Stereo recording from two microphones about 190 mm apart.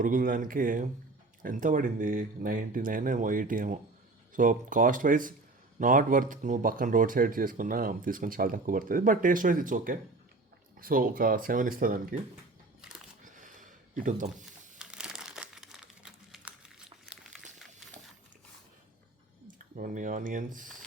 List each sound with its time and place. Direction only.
0.0 s speech: 45° right (ahead or behind)
13.2 s a sound: 45° right (ahead or behind)
14.4 s crumpling: 5° right (ahead or behind)
19.7 s speech: 45° right (ahead or behind)